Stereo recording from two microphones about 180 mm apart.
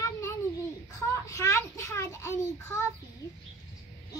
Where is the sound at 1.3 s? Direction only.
15° left (ahead or behind).